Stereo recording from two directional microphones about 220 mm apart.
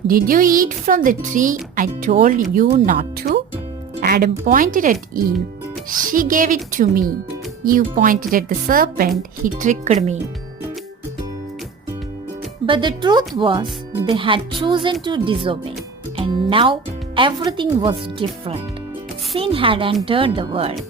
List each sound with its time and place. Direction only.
0.1 s speech: 40° right (ahead or behind)
6.1 s speech: 35° right (ahead or behind)
12.6 s speech: 20° right (ahead or behind)